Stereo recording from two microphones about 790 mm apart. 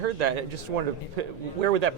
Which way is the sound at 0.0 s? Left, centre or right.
Right.